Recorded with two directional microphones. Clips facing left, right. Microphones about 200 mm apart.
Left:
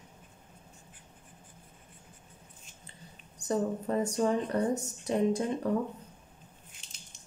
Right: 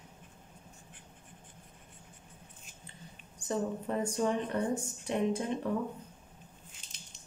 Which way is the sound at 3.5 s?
35° left (ahead or behind).